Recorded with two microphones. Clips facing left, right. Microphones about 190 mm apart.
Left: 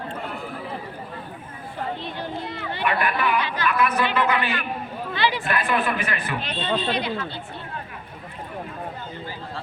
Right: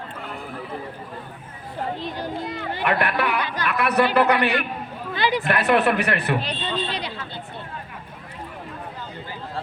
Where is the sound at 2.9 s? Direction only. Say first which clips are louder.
Right 1 dB; 70° right (ahead or behind).